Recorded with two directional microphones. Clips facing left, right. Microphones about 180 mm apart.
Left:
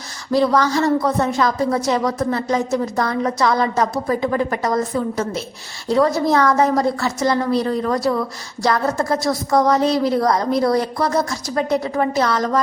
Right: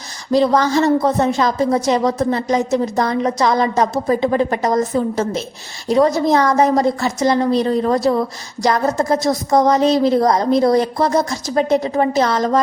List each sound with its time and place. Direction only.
0.3 s a woman's voice: 20° right (ahead or behind)